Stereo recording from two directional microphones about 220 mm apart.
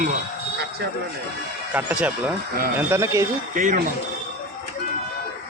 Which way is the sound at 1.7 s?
5° right (ahead or behind).